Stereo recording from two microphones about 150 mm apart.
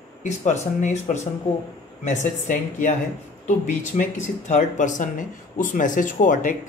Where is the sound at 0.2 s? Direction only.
50° left (ahead or behind).